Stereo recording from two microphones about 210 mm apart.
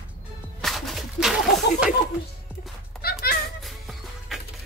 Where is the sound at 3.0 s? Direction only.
45° left (ahead or behind).